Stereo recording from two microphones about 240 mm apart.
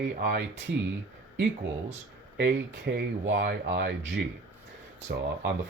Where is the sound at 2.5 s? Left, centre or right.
Right.